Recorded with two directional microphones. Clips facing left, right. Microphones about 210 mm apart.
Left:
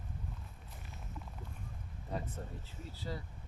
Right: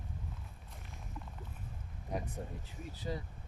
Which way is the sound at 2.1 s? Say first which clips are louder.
Right 2 dB; 15° right (ahead or behind).